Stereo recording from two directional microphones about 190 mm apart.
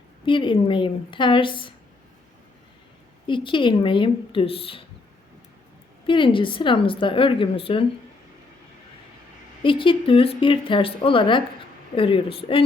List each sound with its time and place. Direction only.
0.3 s a woman's voice: 25° left (ahead or behind)
3.2 s a woman's voice: 25° left (ahead or behind)
6.1 s a woman's voice: 25° left (ahead or behind)
9.6 s a woman's voice: 25° left (ahead or behind)